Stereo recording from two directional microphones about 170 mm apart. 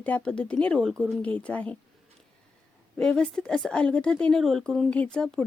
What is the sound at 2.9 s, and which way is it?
Speech, 5° left (ahead or behind).